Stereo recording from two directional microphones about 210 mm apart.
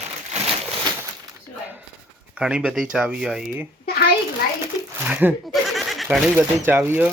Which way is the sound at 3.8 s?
50° left (ahead or behind).